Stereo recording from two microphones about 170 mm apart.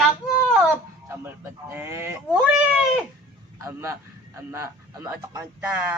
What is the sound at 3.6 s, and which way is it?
Speech, 15° right (ahead or behind).